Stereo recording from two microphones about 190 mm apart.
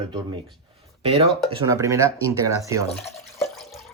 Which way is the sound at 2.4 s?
15° right (ahead or behind).